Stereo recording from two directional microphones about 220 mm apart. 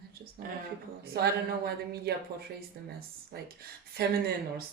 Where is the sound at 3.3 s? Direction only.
45° right (ahead or behind).